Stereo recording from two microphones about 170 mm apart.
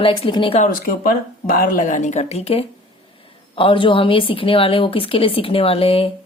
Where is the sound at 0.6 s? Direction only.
55° left (ahead or behind); by 6.1 s 35° left (ahead or behind).